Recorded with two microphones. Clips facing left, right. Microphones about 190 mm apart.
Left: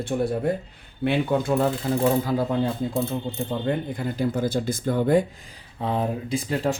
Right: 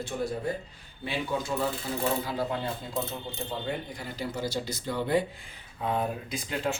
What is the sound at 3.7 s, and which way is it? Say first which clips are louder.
Speech: left 8 dB; 55° left (ahead or behind).